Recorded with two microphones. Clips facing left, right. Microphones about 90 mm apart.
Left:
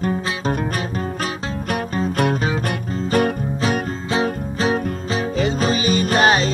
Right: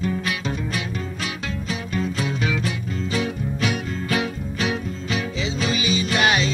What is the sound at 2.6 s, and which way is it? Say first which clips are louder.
Music: left 4 dB; 55° left (ahead or behind).